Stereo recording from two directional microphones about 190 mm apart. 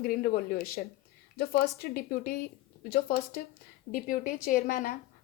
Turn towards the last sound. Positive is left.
turn(degrees=50)  # may be behind; listen again after turning